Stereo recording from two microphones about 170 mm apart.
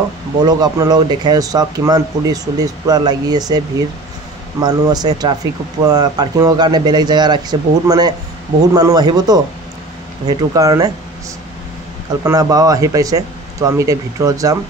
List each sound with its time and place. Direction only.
0.5 s speech: 25° right (ahead or behind)
12.2 s speech: 20° right (ahead or behind)